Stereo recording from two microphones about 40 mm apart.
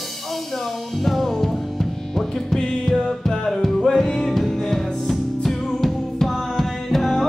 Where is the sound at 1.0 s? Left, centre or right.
Centre.